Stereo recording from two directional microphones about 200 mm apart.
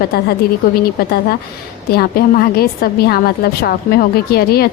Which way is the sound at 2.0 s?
50° left (ahead or behind).